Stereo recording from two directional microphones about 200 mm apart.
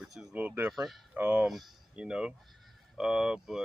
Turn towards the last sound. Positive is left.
turn(degrees=-5)  # may be behind; listen again after turning